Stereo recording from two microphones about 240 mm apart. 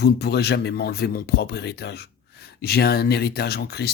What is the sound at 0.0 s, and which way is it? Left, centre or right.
Speech, left.